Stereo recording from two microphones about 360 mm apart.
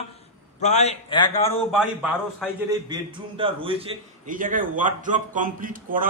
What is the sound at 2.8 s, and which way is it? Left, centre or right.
A man's voice, centre.